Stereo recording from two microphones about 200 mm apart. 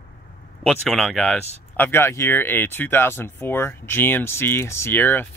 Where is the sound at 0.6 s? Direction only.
Centre (ahead or behind).